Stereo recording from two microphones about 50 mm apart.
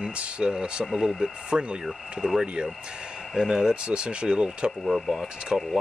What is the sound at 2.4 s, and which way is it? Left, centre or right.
Speech, right.